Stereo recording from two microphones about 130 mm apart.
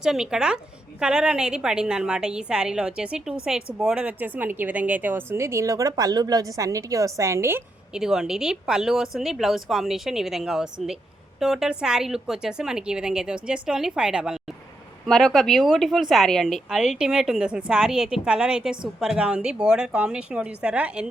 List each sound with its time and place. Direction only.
0.0 s a woman's voice: 5° right (ahead or behind)
7.9 s a woman's voice: 5° right (ahead or behind)